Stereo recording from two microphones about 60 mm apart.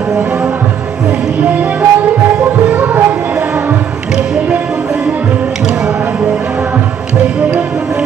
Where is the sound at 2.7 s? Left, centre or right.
Right.